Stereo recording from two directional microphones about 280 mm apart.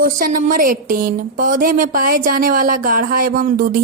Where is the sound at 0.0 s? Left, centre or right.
Right.